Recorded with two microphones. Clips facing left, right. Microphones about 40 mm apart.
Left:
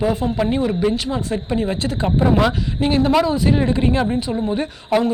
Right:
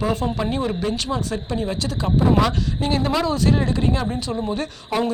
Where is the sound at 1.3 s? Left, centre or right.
Left.